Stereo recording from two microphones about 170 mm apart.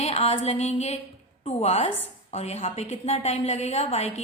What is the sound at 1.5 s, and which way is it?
A woman's voice, 40° left (ahead or behind).